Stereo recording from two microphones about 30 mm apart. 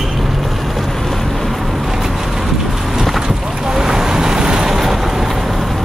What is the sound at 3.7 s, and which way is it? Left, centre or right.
Vehicle, right.